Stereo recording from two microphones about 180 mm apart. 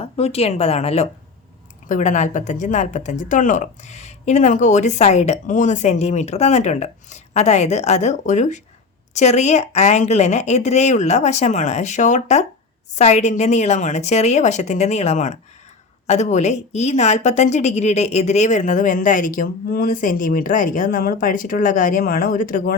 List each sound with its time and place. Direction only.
0.0 s a woman's voice: 35° left (ahead or behind); by 22.7 s 50° left (ahead or behind)